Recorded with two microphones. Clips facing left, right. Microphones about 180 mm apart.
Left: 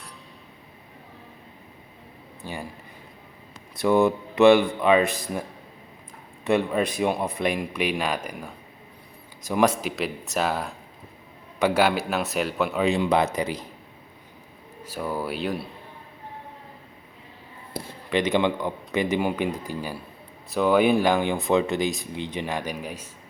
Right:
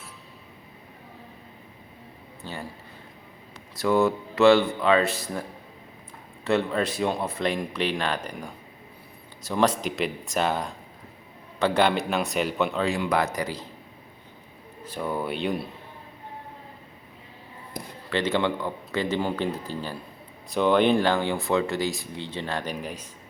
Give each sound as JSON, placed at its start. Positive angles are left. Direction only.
{"t": 2.4, "sound": "a sound", "side_deg": 15}
{"t": 3.8, "sound": "speech", "side_deg": 15}
{"t": 12.8, "sound": "speech", "side_deg": 20}
{"t": 14.8, "sound": "speech", "side_deg": 5}
{"t": 18.1, "sound": "speech", "side_deg": 15}